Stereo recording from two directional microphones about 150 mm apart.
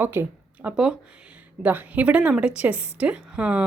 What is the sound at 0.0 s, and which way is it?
Speech, 15° right (ahead or behind).